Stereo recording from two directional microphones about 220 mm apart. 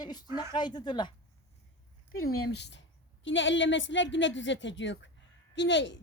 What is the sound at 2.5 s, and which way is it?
A woman's voice, 50° left (ahead or behind).